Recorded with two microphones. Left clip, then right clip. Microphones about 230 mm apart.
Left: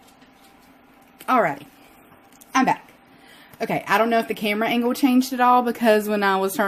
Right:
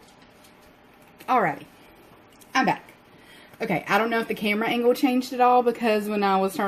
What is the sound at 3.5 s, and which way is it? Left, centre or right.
Speech, left.